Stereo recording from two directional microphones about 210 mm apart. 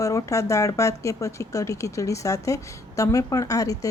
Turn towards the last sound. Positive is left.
turn(degrees=15)  # may be behind; listen again after turning